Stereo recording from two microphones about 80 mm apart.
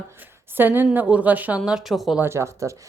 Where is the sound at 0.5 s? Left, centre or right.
Right.